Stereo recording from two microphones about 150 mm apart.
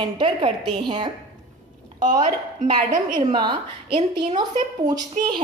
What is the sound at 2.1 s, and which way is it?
Speech, 60° right (ahead or behind).